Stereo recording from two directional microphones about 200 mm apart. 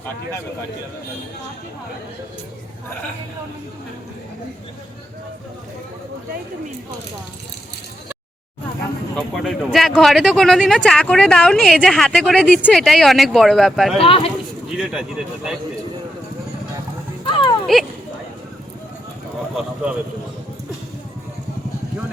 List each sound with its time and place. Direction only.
9.1 s speech: centre (ahead or behind)
14.0 s speech: 30° left (ahead or behind)
14.8 s speech: 5° right (ahead or behind)
17.2 s a sound: 25° left (ahead or behind)
17.7 s speech: centre (ahead or behind)
19.5 s speech: 5° right (ahead or behind)